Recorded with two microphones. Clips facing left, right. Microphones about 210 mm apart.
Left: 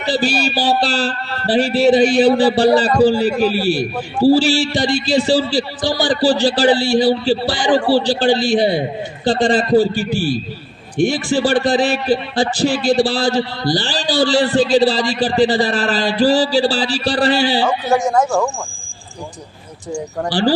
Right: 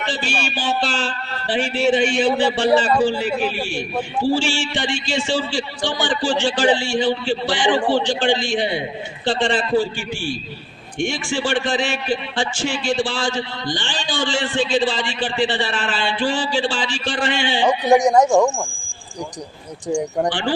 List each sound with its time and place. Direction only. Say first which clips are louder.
0.0 s a man's voice: left 7 dB; 35° left (ahead or behind)
17.7 s speech: right 2 dB; 15° right (ahead or behind)